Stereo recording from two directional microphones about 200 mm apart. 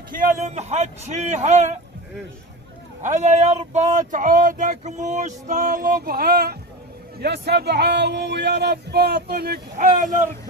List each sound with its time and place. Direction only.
0.1 s speech: 35° right (ahead or behind)
3.0 s a man's voice: 35° right (ahead or behind)